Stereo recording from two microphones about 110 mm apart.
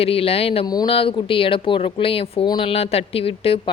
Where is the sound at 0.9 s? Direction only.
55° left (ahead or behind).